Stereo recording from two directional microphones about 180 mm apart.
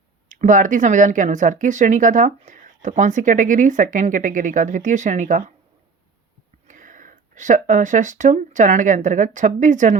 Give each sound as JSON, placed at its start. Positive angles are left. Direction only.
{"t": 0.3, "sound": "speech", "side_deg": -45}
{"t": 6.7, "sound": "speech", "side_deg": -45}